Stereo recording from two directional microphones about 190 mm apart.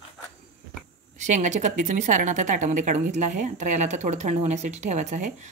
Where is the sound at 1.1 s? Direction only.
40° right (ahead or behind).